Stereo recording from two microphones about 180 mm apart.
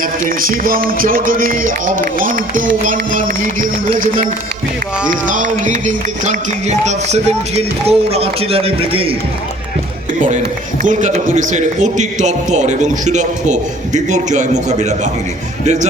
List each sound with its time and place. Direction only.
0.3 s a man's voice: 50° right (ahead or behind)
5.3 s speech: 45° right (ahead or behind)
10.8 s a man's voice: 45° right (ahead or behind)